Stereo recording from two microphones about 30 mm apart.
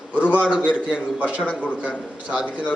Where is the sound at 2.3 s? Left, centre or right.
Right.